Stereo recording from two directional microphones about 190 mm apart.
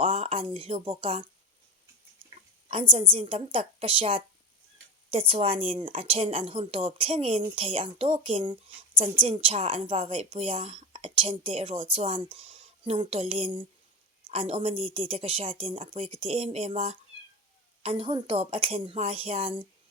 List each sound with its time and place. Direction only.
0.0 s a woman's voice: 30° right (ahead or behind)
2.6 s a woman's voice: 30° right (ahead or behind)